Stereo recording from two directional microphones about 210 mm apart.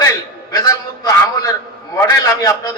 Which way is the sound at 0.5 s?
15° left (ahead or behind).